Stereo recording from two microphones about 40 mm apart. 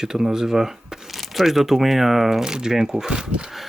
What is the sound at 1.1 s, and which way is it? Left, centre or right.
Speech, centre.